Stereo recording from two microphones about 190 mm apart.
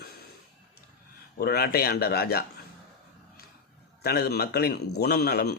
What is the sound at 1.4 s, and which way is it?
A man's voice, 55° left (ahead or behind).